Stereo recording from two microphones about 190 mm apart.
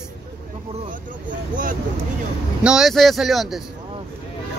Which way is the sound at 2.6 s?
5° right (ahead or behind).